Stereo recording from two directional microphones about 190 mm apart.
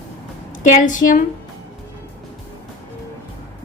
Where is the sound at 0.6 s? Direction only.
40° left (ahead or behind).